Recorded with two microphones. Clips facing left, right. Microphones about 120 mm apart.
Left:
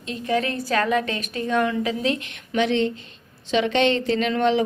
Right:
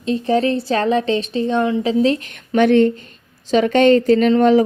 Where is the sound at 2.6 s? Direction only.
50° right (ahead or behind).